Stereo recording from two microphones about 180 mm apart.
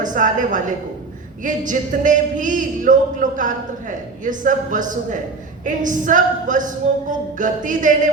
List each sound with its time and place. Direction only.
0.0 s speech: 45° right (ahead or behind)